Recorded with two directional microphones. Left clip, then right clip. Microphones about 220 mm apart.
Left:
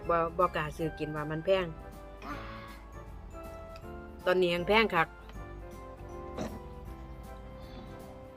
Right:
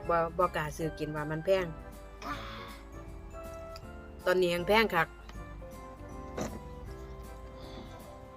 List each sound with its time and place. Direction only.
0.0 s speech: centre (ahead or behind)
2.2 s music: 50° right (ahead or behind)
4.2 s speech: 5° left (ahead or behind)